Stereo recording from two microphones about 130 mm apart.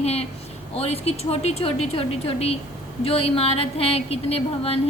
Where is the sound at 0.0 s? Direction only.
55° left (ahead or behind).